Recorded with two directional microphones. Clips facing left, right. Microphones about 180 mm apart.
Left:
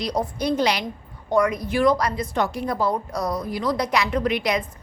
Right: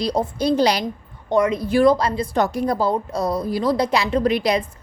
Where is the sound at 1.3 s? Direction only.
25° right (ahead or behind).